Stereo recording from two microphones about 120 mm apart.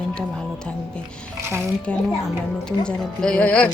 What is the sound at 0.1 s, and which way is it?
Music, 5° left (ahead or behind).